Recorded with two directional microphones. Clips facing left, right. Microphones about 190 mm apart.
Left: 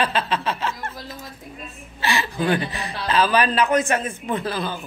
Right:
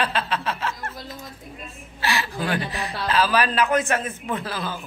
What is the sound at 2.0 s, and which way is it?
Speech, 5° right (ahead or behind).